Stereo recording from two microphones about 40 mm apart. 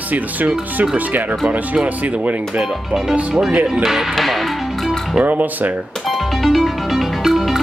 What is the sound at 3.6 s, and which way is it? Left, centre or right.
Speech, centre.